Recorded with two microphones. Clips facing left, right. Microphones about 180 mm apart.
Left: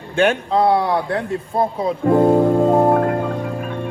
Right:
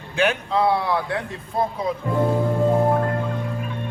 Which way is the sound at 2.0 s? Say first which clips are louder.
Left 9 dB; 55° left (ahead or behind).